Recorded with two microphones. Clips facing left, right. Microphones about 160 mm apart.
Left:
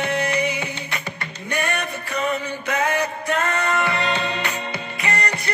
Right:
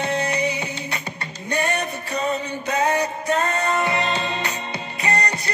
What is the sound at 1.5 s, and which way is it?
Music, 25° right (ahead or behind).